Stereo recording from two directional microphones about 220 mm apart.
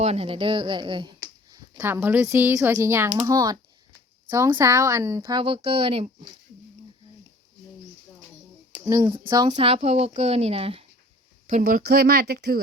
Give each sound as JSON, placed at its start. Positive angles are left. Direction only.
{"t": 0.0, "sound": "speech", "side_deg": -25}
{"t": 8.7, "sound": "speech", "side_deg": -15}